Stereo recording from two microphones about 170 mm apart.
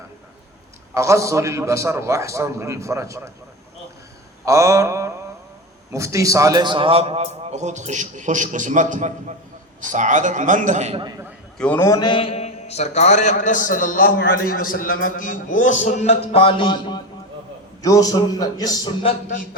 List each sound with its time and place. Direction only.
0.9 s a man's voice: 15° right (ahead or behind)
4.4 s a man's voice: 20° right (ahead or behind); by 11.0 s 40° right (ahead or behind)
11.5 s a man's voice: 5° left (ahead or behind)
11.9 s a man's voice: 30° left (ahead or behind)